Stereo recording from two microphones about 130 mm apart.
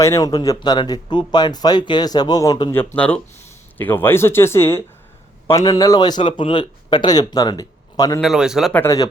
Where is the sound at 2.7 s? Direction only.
10° left (ahead or behind); by 8.2 s 30° left (ahead or behind).